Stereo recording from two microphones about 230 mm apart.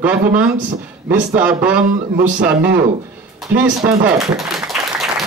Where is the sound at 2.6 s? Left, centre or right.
Right.